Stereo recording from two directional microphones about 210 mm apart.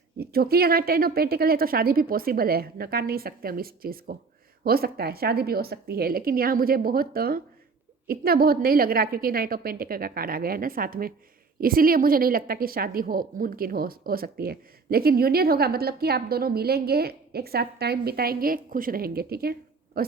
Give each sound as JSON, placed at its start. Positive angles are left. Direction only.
{"t": 0.2, "sound": "a woman's voice", "side_deg": -45}